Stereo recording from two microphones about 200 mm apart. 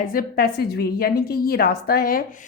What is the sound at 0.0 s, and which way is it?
A woman's voice, 45° left (ahead or behind).